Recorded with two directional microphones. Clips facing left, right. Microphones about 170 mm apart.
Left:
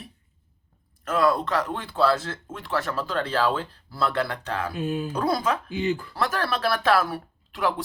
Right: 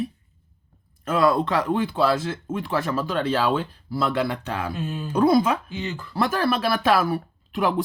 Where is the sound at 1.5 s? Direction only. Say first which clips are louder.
Right 3 dB; 20° right (ahead or behind).